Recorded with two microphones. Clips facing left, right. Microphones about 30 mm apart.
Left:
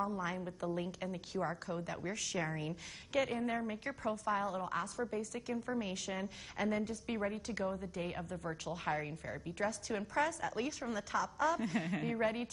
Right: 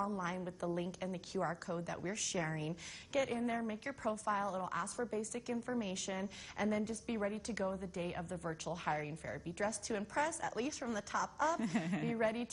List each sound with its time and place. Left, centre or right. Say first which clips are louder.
0.2 s a woman's voice: left 1 dB; centre
3.8 s a woman's voice: left 1 dB; centre
10.1 s a woman's voice: left 3 dB; left